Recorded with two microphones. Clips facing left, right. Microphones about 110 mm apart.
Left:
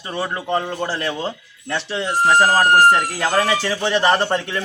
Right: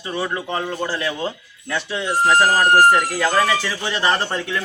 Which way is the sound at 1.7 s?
25° left (ahead or behind).